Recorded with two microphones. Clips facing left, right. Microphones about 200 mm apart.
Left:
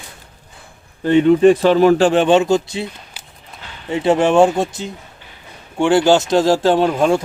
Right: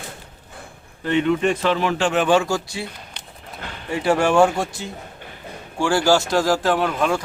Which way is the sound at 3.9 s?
20° left (ahead or behind).